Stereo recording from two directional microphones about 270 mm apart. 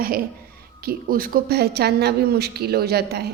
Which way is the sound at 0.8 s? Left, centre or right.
Right.